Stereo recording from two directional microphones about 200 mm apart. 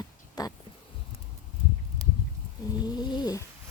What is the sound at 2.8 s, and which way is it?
Cat, 20° left (ahead or behind).